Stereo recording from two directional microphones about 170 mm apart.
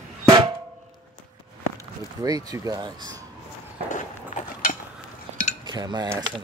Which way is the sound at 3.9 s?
45° left (ahead or behind).